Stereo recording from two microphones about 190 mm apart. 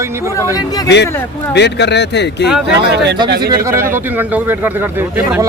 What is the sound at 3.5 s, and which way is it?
Speech, 15° right (ahead or behind).